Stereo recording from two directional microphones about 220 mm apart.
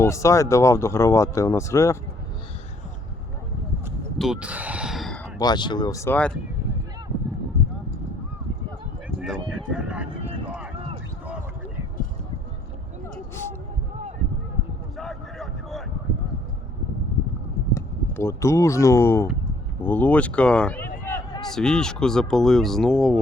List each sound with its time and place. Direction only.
0.0 s speech: 15° left (ahead or behind)
4.2 s speech: 5° right (ahead or behind)
5.4 s speech: 20° left (ahead or behind)
9.0 s a sound: centre (ahead or behind)
14.9 s vehicle: centre (ahead or behind)
17.7 s speech: 10° left (ahead or behind)